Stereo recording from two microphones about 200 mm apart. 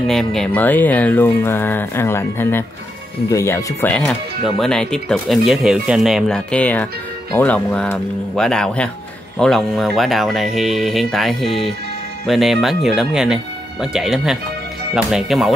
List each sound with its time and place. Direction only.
0.1 s speech: centre (ahead or behind)